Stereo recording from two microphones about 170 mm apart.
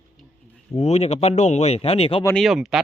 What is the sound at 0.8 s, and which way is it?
Speech, 40° left (ahead or behind).